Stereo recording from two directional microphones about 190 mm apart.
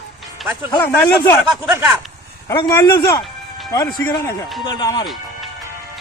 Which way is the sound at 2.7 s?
15° left (ahead or behind).